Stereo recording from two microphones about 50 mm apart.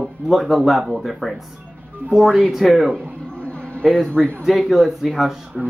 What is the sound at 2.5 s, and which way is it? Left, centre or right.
Speech, centre.